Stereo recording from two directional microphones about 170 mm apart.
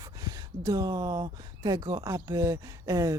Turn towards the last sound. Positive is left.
turn(degrees=-20)  # may be behind; listen again after turning